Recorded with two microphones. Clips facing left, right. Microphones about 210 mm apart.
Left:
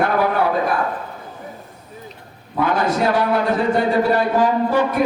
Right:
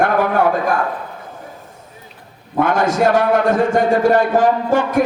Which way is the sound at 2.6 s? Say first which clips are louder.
Right 3 dB; 50° right (ahead or behind).